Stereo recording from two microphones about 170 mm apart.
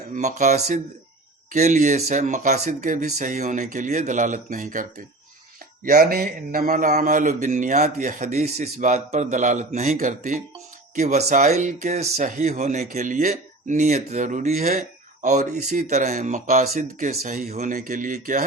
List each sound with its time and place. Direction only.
0.1 s speech: 45° right (ahead or behind)
16.6 s speech: 60° right (ahead or behind)
17.5 s speech: 45° right (ahead or behind)